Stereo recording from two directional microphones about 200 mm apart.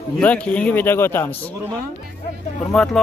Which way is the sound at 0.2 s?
5° left (ahead or behind).